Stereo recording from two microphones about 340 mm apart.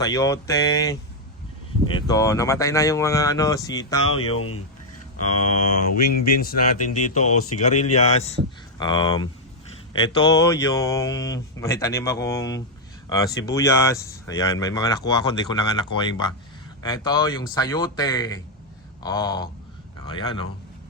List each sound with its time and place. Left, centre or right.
0.0 s speech: centre
4.4 s speech: left
5.2 s mantra: left
7.0 s a man's voice: left